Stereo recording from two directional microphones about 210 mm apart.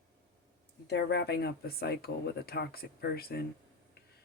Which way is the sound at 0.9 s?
50° left (ahead or behind).